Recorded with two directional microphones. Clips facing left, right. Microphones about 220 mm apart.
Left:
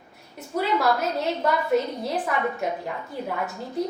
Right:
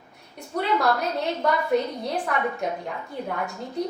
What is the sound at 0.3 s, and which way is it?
A woman's voice, centre (ahead or behind).